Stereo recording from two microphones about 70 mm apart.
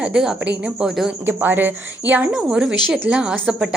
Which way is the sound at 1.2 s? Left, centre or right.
Right.